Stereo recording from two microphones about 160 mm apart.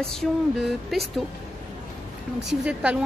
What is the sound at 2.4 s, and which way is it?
Speech, 5° right (ahead or behind).